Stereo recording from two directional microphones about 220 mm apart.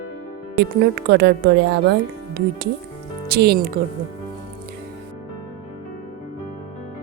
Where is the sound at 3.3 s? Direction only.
45° right (ahead or behind).